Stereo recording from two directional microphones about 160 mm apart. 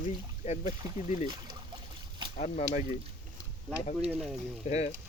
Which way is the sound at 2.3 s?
50° left (ahead or behind).